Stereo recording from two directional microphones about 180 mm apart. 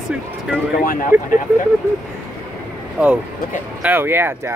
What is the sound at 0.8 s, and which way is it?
Speech, 50° left (ahead or behind).